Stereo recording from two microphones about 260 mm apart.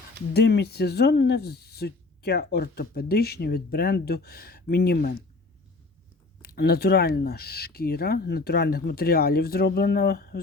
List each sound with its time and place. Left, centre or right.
0.3 s speech: left
6.4 s speech: left